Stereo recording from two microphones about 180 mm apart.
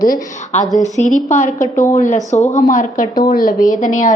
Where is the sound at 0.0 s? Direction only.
50° left (ahead or behind).